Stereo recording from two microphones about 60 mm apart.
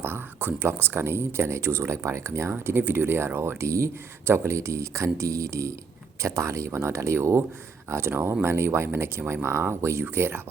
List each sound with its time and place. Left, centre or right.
0.0 s speech: right
3.6 s speech: right
10.0 s speech: right